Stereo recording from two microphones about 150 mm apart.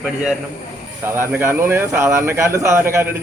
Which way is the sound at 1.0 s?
15° right (ahead or behind).